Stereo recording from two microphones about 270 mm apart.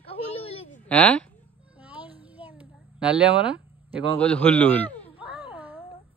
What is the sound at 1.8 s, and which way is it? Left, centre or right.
Music, centre.